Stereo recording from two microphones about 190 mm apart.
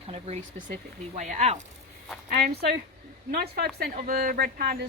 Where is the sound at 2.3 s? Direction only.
50° right (ahead or behind).